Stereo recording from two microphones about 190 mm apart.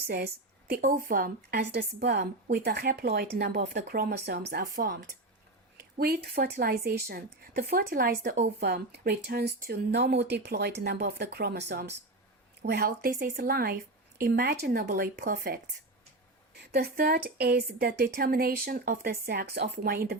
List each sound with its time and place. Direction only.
0.7 s a woman's voice: 45° right (ahead or behind)
16.7 s a woman's voice: 50° right (ahead or behind)